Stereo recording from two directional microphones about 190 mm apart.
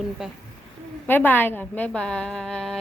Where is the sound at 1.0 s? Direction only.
10° left (ahead or behind).